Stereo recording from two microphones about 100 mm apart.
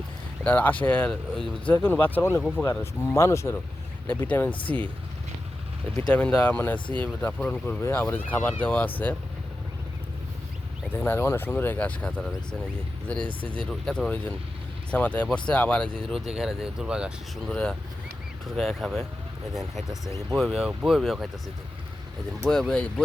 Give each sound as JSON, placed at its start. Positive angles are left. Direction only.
{"t": 0.4, "sound": "speech", "side_deg": 15}
{"t": 4.0, "sound": "speech", "side_deg": 15}
{"t": 6.1, "sound": "speech", "side_deg": 15}
{"t": 7.8, "sound": "speech", "side_deg": 25}
{"t": 10.9, "sound": "speech", "side_deg": 20}
{"t": 17.5, "sound": "speech", "side_deg": 10}
{"t": 22.4, "sound": "speech", "side_deg": 5}